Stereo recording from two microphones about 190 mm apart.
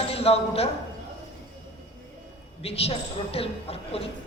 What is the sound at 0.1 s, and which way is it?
Speech, 30° left (ahead or behind).